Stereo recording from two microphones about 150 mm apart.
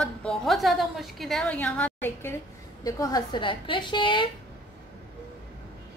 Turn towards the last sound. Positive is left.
turn(degrees=35)  # may be behind; listen again after turning